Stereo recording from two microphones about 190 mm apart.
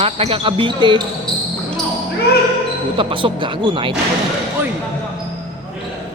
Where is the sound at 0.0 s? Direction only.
30° right (ahead or behind).